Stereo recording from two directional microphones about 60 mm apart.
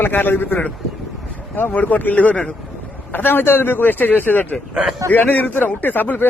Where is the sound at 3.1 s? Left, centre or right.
Left.